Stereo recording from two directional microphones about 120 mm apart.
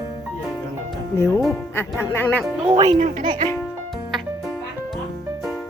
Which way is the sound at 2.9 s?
90° right.